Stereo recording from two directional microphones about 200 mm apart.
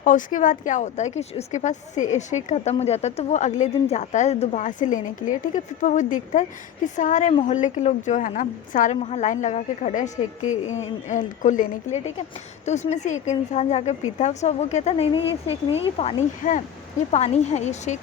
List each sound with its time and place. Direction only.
0.0 s a woman's voice: 40° left (ahead or behind)
11.1 s a woman's voice: 40° left (ahead or behind)